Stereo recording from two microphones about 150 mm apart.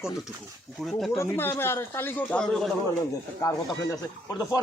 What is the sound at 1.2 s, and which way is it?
A man's voice, 15° left (ahead or behind).